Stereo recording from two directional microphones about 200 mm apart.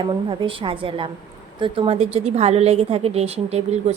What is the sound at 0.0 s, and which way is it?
A woman's voice, 25° right (ahead or behind).